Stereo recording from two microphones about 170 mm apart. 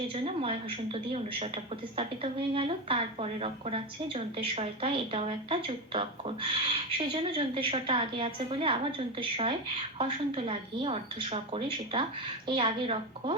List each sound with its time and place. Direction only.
0.1 s a woman's voice: 35° right (ahead or behind)